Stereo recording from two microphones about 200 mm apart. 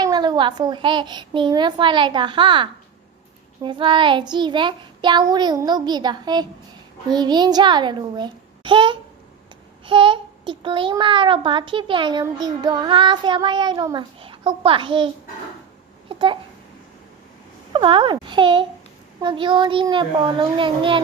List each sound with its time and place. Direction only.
0.0 s a child's voice: 20° right (ahead or behind)
17.7 s a child's voice: 25° right (ahead or behind)